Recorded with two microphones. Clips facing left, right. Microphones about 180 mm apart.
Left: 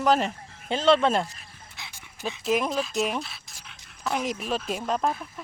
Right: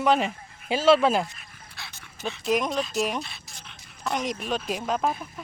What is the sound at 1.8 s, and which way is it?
Dog, 15° left (ahead or behind).